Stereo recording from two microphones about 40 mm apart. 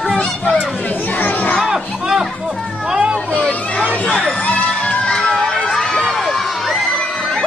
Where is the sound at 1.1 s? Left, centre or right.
Left.